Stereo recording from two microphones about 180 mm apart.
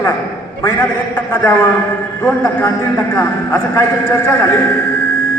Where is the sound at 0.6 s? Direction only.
10° left (ahead or behind).